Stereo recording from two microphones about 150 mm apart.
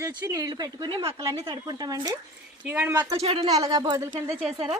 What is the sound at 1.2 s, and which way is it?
Speech, 20° right (ahead or behind).